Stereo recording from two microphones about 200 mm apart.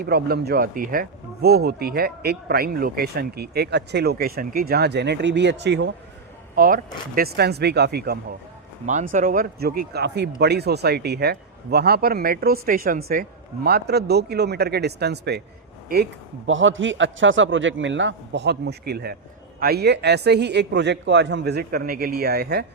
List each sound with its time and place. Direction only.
0.0 s speech: 55° right (ahead or behind)
6.6 s a man's voice: 45° right (ahead or behind)
16.5 s a man's voice: 75° right (ahead or behind); by 22.6 s 55° right (ahead or behind)